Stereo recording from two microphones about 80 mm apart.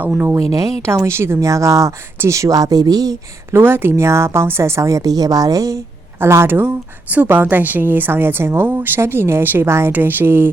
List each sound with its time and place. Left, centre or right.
0.0 s a woman's voice: right
0.3 s speech: right
0.8 s speech: right
3.5 s speech: right
6.1 s a woman's voice: right